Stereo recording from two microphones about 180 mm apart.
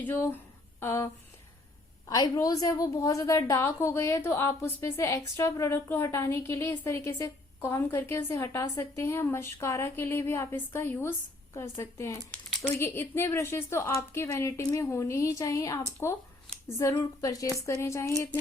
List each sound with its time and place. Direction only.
0.0 s a woman's voice: 10° left (ahead or behind)